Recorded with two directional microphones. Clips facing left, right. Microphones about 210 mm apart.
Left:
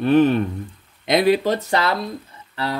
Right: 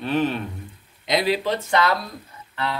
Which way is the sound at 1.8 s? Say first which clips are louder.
Even; 30° left (ahead or behind).